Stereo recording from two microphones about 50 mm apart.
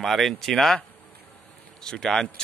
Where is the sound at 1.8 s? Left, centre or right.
Centre.